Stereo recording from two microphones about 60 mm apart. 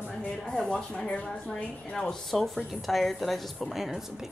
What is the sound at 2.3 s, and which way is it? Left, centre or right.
A woman's voice, centre.